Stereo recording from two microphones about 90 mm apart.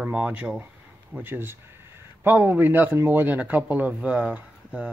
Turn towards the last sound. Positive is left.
turn(degrees=-10)  # may be behind; listen again after turning